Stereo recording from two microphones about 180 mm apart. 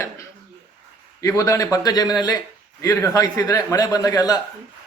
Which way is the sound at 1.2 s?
20° left (ahead or behind).